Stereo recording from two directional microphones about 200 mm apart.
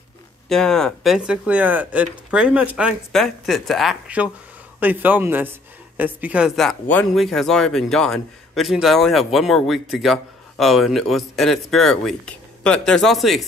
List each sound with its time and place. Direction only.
0.5 s speech: centre (ahead or behind)